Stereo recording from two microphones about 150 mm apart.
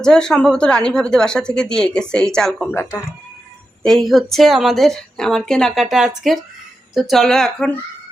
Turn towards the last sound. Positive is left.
turn(degrees=5)  # may be behind; listen again after turning